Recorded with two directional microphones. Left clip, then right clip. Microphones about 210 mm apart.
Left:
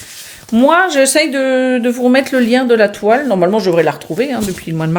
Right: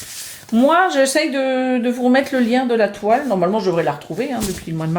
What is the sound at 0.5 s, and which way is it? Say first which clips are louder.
Speech: left 4 dB; 35° left (ahead or behind).